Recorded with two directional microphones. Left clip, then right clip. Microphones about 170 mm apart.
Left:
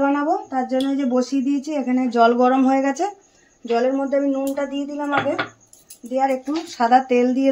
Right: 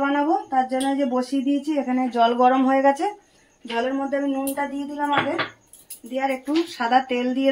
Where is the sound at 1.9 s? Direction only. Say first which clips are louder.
Left 5 dB; 90° left.